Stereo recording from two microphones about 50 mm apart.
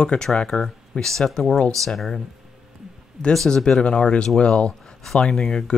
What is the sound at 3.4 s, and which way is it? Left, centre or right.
Speech, centre.